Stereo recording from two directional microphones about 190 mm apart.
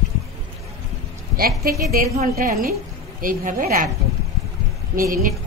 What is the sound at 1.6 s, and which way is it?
A woman's voice, 50° right (ahead or behind).